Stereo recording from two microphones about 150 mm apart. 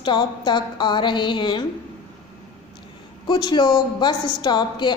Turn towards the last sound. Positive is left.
turn(degrees=30)  # may be behind; listen again after turning